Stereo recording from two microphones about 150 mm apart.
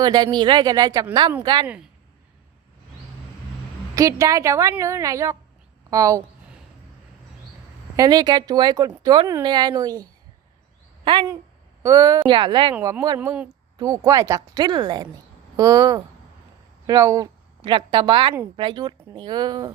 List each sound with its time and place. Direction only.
0.0 s a woman's voice: 30° right (ahead or behind)
3.9 s a woman's voice: 20° right (ahead or behind)
7.9 s a woman's voice: 25° right (ahead or behind)
11.8 s a woman's voice: 20° right (ahead or behind)
13.7 s a woman's voice: 20° right (ahead or behind)
17.6 s a woman's voice: 35° right (ahead or behind)